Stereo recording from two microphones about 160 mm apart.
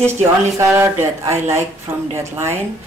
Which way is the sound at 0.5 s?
15° right (ahead or behind).